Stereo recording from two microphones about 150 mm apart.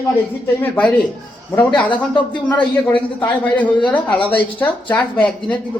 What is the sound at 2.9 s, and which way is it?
A woman's voice, 10° left (ahead or behind).